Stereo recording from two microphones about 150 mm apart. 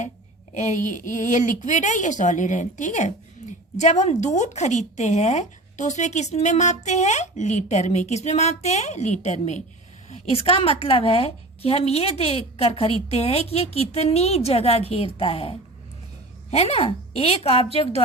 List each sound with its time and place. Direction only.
0.5 s a woman's voice: 55° left (ahead or behind)
10.1 s a woman's voice: 40° left (ahead or behind)